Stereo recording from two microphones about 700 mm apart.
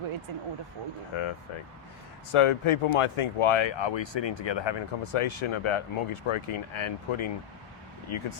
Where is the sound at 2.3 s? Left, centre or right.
Left.